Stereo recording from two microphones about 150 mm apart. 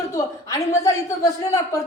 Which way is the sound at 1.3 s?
20° left (ahead or behind).